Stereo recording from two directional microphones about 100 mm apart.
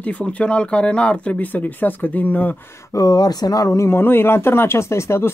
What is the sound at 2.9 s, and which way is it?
Speech, 40° left (ahead or behind).